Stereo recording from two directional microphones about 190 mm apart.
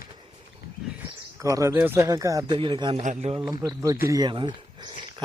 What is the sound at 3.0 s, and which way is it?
Speech, 35° right (ahead or behind).